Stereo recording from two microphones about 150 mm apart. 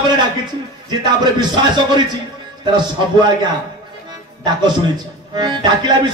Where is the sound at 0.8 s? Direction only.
30° right (ahead or behind).